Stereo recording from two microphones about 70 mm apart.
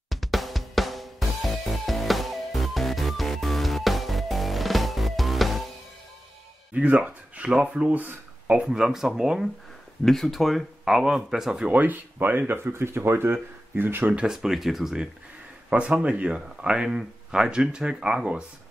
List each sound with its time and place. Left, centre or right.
0.1 s music: centre
6.7 s speech: right
10.0 s speech: centre
11.6 s speech: right
14.1 s speech: centre
15.9 s speech: centre